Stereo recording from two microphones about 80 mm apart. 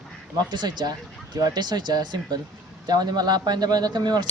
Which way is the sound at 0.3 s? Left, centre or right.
Right.